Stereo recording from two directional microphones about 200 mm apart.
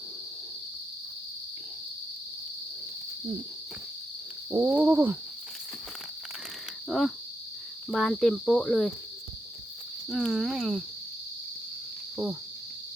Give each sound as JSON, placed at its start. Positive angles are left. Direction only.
{"t": 4.5, "sound": "wild animals", "side_deg": -10}
{"t": 6.8, "sound": "cricket", "side_deg": 0}
{"t": 10.1, "sound": "cricket", "side_deg": 0}
{"t": 12.1, "sound": "cricket", "side_deg": -5}